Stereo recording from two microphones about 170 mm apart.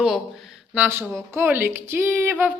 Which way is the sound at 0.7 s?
10° right (ahead or behind).